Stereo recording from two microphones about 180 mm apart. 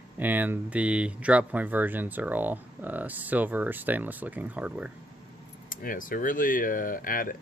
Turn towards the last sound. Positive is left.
turn(degrees=50)  # may be behind; listen again after turning